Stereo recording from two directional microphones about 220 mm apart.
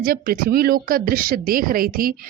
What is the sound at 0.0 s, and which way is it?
Speech, 40° right (ahead or behind).